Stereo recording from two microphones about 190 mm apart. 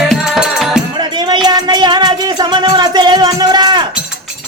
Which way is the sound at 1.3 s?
20° right (ahead or behind).